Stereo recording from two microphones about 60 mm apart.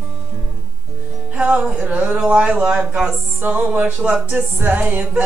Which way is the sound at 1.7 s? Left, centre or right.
Right.